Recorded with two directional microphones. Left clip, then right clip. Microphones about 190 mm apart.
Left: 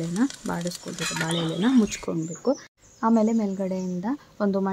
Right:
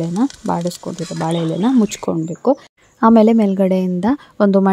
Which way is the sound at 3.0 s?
40° right (ahead or behind).